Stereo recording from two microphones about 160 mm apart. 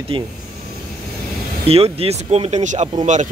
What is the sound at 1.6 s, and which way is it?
Speech, 40° right (ahead or behind).